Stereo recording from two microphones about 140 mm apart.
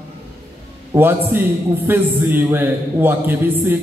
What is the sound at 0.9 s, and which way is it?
A man's voice, 15° right (ahead or behind).